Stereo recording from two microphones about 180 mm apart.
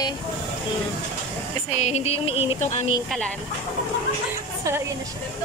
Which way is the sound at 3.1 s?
5° left (ahead or behind).